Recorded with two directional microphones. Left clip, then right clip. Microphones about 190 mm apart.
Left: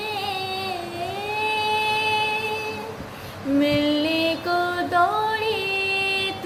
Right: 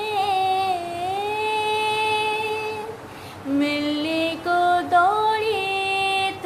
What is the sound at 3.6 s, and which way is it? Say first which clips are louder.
Music: left 3 dB; 15° right (ahead or behind).